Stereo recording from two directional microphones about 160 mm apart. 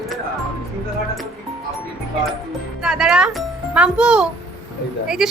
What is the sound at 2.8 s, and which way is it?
Speech, 5° right (ahead or behind).